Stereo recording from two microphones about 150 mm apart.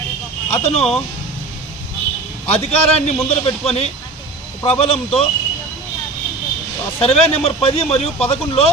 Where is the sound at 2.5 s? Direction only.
45° left (ahead or behind).